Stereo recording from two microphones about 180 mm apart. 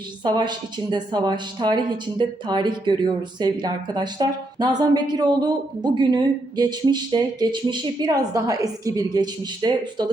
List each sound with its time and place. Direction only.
0.3 s speech: 25° right (ahead or behind)